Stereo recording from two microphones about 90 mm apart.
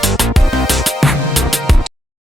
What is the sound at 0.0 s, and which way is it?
Music, centre (ahead or behind).